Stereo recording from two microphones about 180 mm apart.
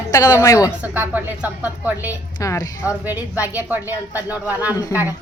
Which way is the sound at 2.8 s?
10° right (ahead or behind).